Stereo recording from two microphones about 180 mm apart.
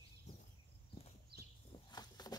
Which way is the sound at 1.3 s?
60° right (ahead or behind).